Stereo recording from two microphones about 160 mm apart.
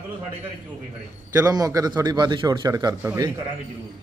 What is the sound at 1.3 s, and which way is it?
A man's voice, 20° right (ahead or behind).